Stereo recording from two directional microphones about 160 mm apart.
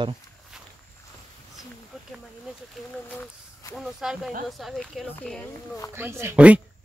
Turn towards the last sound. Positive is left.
turn(degrees=-10)  # may be behind; listen again after turning